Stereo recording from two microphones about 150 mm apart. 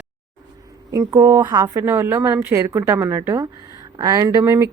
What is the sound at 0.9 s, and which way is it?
A woman's voice, 20° right (ahead or behind).